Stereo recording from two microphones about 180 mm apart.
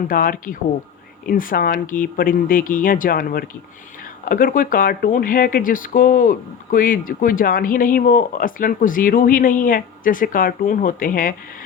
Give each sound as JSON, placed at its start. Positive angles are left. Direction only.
{"t": 0.1, "sound": "speech", "side_deg": 50}